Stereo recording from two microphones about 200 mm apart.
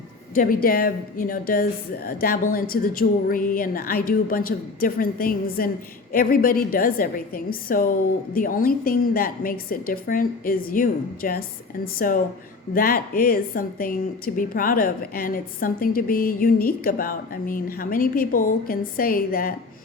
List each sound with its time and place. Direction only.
0.3 s a woman's voice: 45° left (ahead or behind)